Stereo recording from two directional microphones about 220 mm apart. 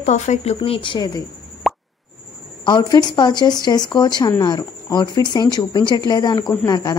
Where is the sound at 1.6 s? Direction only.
Centre (ahead or behind).